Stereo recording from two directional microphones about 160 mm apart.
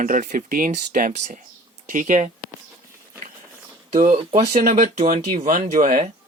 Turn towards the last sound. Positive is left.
turn(degrees=-55)  # may be behind; listen again after turning